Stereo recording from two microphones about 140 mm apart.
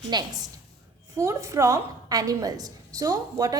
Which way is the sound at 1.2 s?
20° right (ahead or behind).